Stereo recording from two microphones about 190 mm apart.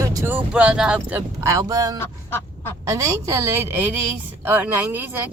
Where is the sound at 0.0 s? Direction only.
15° right (ahead or behind).